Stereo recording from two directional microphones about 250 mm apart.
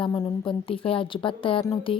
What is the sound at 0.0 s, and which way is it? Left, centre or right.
A woman's voice, centre.